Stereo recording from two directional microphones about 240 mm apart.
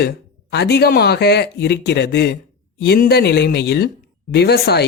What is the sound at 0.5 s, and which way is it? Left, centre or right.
Speech, left.